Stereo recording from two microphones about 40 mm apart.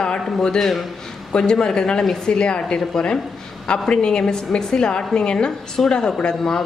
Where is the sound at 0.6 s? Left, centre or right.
Centre.